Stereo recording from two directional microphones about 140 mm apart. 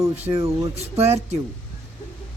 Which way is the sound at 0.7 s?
50° right (ahead or behind).